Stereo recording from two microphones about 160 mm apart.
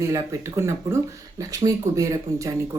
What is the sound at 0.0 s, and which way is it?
Speech, 20° right (ahead or behind).